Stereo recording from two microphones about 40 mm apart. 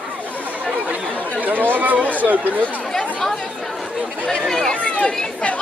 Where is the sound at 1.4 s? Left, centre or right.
Right.